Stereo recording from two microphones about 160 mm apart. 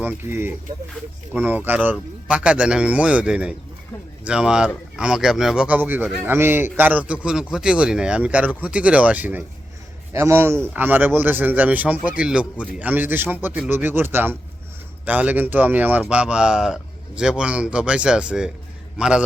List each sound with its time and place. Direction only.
0.0 s a man's voice: 10° right (ahead or behind)